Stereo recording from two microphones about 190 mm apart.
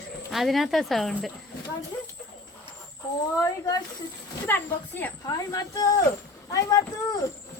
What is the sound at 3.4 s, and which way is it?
Speech, 20° left (ahead or behind).